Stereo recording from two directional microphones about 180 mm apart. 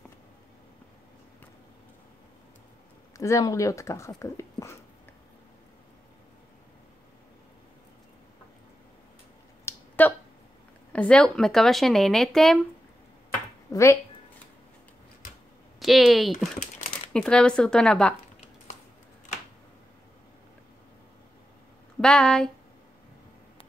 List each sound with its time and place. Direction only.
3.2 s speech: 15° left (ahead or behind)
9.7 s a sound: 10° left (ahead or behind)
10.9 s speech: 5° left (ahead or behind)
13.7 s speech: 15° left (ahead or behind)
15.8 s speech: centre (ahead or behind)
22.0 s speech: 5° left (ahead or behind)